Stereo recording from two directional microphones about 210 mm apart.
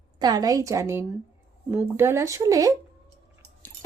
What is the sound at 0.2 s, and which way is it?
Speech, 20° right (ahead or behind).